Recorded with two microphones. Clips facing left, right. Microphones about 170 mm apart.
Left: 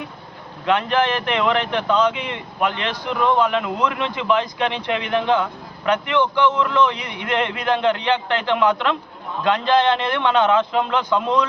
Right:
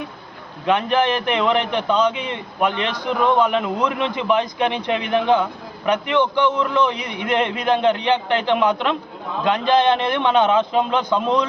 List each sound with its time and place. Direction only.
0.6 s a man's voice: 15° right (ahead or behind)